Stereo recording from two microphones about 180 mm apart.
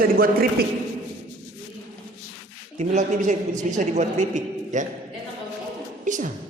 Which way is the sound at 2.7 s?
40° right (ahead or behind).